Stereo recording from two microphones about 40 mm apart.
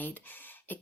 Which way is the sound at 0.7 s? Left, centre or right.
Left.